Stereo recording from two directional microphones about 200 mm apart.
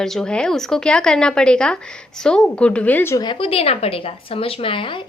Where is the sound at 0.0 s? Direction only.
Centre (ahead or behind).